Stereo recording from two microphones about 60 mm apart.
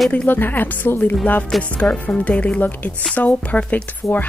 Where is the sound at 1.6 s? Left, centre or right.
Left.